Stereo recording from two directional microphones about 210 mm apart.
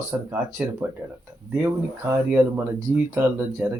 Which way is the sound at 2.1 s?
15° right (ahead or behind).